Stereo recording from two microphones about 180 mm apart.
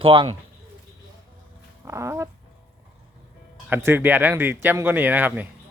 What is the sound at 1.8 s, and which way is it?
Speech, 15° right (ahead or behind).